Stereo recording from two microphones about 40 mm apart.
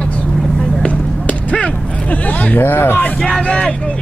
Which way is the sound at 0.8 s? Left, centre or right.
Left.